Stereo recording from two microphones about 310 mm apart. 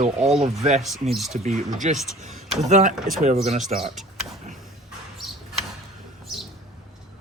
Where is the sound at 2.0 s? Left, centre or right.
Centre.